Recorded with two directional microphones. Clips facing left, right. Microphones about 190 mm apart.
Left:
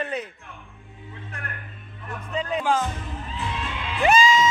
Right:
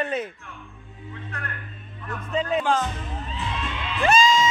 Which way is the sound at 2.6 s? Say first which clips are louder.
Left 3 dB; 10° left (ahead or behind).